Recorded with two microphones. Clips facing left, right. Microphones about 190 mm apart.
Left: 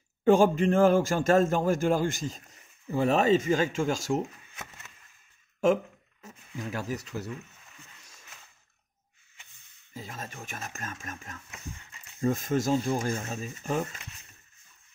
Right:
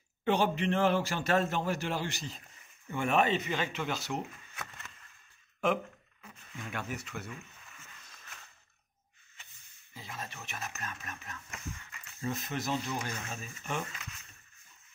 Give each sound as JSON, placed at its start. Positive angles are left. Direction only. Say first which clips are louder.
{"t": 0.2, "sound": "a man's voice", "louder": "left 8 dB", "side_deg": 45}
{"t": 4.6, "sound": "a sound", "louder": "even", "side_deg": 20}
{"t": 6.2, "sound": "speech", "louder": "left 7 dB", "side_deg": 35}
{"t": 9.9, "sound": "a man's voice", "louder": "left 4 dB", "side_deg": 45}
{"t": 11.8, "sound": "a sound", "louder": "left 10 dB", "side_deg": 25}
{"t": 12.3, "sound": "a man's voice", "louder": "left 9 dB", "side_deg": 45}